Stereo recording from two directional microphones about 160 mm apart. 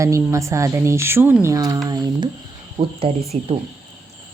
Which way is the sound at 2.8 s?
45° right (ahead or behind).